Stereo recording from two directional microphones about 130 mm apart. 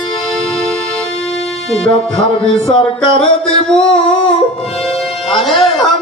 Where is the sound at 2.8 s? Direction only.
40° left (ahead or behind).